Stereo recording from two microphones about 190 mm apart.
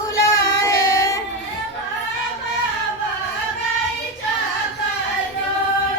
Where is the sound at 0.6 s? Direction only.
15° left (ahead or behind).